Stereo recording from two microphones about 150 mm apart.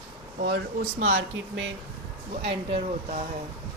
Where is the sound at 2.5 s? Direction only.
45° right (ahead or behind).